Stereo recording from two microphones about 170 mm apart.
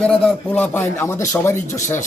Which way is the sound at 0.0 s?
5° left (ahead or behind).